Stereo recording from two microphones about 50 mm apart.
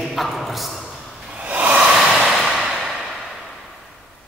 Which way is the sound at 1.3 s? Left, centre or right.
Right.